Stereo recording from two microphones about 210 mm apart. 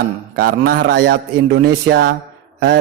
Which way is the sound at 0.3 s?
45° right (ahead or behind).